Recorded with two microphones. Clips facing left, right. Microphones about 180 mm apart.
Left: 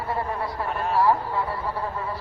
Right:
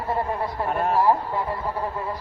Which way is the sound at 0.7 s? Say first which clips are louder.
Right 6 dB; 50° right (ahead or behind).